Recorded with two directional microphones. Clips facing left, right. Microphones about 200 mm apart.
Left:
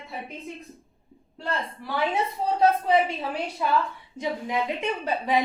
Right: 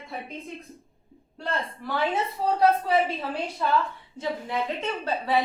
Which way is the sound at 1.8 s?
15° left (ahead or behind).